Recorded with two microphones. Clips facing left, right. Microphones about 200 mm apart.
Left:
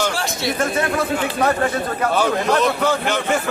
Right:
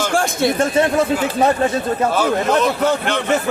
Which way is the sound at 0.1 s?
50° right (ahead or behind).